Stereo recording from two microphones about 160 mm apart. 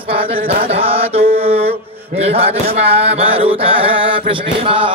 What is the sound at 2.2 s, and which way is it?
Music, 40° right (ahead or behind).